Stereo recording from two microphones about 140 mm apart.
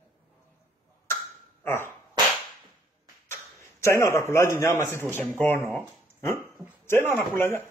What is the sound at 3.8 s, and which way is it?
A man's voice, 20° left (ahead or behind).